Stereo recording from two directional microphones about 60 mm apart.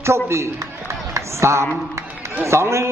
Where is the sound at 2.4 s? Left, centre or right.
Right.